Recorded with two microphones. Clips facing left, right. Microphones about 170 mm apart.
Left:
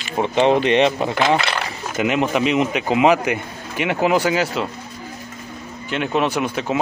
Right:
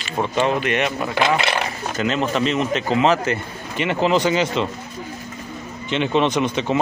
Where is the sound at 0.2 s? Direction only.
25° left (ahead or behind).